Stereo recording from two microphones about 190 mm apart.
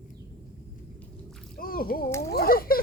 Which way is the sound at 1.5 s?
50° left (ahead or behind).